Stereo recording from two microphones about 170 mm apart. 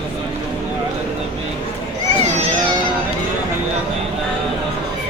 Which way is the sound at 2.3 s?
35° right (ahead or behind).